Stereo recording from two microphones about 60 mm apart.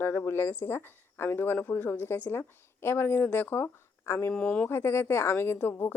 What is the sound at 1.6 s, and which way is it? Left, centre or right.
Speech, left.